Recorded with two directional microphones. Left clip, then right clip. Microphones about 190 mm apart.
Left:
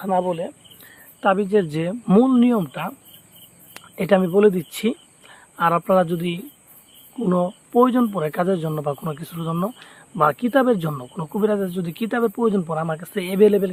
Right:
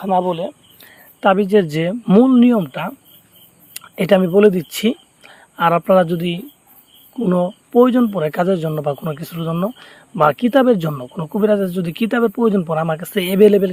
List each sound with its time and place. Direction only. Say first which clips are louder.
0.0 s speech: right 4 dB; 30° right (ahead or behind)